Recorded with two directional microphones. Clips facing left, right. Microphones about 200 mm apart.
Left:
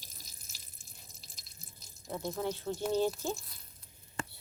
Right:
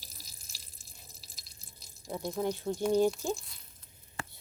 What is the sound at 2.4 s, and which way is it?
Speech, 15° right (ahead or behind).